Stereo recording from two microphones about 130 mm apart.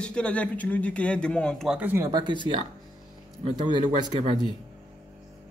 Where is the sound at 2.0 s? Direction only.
30° right (ahead or behind).